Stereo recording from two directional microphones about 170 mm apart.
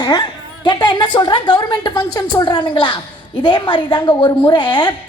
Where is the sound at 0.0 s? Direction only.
25° left (ahead or behind).